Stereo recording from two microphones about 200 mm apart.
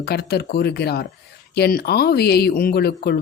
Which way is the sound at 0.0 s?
50° left (ahead or behind).